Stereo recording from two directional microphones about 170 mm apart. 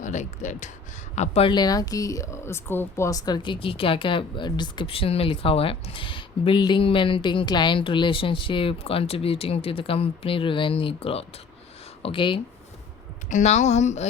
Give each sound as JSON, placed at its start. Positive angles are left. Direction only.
{"t": 0.0, "sound": "speech", "side_deg": 45}
{"t": 13.3, "sound": "speech", "side_deg": 45}